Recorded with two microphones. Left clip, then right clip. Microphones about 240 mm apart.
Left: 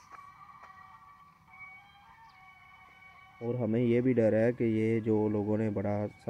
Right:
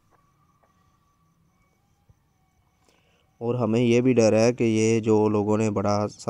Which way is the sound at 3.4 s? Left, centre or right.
Right.